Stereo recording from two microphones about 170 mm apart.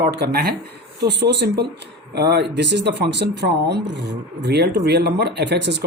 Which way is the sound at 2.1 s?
75° right (ahead or behind).